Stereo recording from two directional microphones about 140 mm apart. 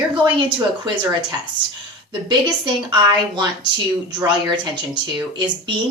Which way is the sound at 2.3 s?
30° right (ahead or behind).